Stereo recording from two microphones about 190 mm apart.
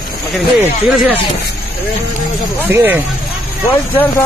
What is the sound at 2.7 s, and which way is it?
Speech, 10° right (ahead or behind).